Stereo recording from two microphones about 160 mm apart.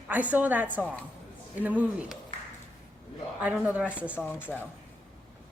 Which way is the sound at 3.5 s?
5° right (ahead or behind).